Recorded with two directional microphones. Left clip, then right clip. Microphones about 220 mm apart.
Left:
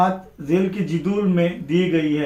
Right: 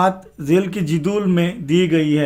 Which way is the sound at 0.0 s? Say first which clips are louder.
Right 2 dB; 45° right (ahead or behind).